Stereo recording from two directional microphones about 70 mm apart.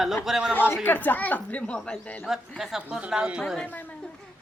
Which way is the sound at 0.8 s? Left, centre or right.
Left.